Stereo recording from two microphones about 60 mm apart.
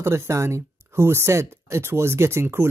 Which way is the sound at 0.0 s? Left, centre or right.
Right.